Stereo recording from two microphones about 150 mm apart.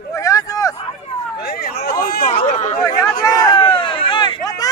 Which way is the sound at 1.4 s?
90° left.